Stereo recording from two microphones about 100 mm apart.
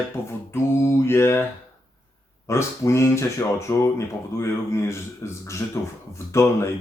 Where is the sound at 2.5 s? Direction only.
30° left (ahead or behind).